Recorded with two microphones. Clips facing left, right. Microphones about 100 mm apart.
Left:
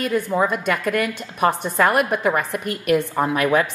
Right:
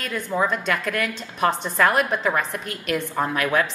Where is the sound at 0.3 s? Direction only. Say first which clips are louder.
Left 3 dB; 10° left (ahead or behind).